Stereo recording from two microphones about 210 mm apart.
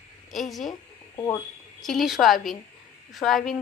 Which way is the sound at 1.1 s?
15° left (ahead or behind).